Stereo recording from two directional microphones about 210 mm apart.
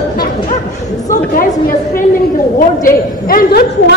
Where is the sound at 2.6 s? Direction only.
40° left (ahead or behind).